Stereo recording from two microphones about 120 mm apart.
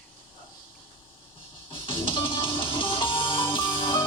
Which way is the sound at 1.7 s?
45° left (ahead or behind).